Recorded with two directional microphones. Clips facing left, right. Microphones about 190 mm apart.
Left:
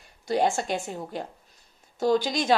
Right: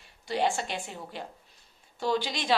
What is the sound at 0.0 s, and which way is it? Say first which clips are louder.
Speech: left 4 dB; 45° left (ahead or behind).